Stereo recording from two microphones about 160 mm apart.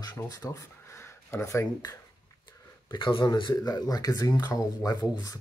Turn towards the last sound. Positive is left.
turn(degrees=20)  # may be behind; listen again after turning